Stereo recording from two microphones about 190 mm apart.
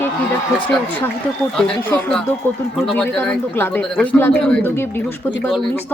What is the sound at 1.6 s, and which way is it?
A man's voice, 5° left (ahead or behind).